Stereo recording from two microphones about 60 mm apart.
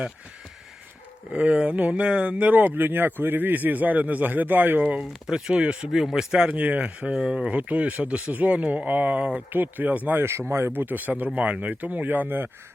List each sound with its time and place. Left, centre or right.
1.3 s speech: centre
5.2 s speech: centre
6.5 s speech: right
7.2 s speech: centre
7.5 s speech: right
10.2 s speech: right
10.5 s speech: right